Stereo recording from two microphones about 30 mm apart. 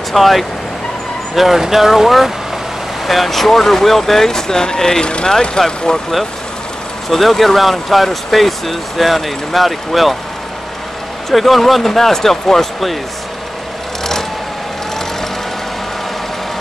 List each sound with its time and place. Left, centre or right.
0.1 s speech: centre
5.0 s speech: left
7.1 s speech: centre
11.2 s speech: centre